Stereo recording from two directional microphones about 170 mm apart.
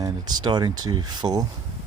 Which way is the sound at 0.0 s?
25° right (ahead or behind).